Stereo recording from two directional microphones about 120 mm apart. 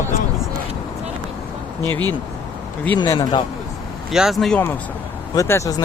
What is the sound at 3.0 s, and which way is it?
Speech, 40° left (ahead or behind).